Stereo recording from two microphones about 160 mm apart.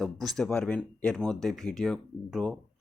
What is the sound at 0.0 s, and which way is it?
Speech, centre (ahead or behind).